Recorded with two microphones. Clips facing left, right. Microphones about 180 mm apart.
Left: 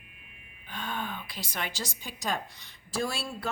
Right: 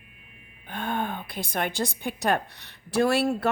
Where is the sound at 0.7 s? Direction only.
55° right (ahead or behind).